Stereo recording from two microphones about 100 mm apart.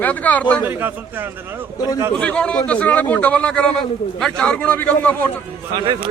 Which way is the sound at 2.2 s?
10° left (ahead or behind).